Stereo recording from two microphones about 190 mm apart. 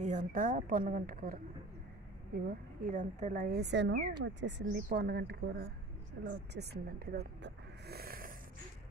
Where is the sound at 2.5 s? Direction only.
45° right (ahead or behind).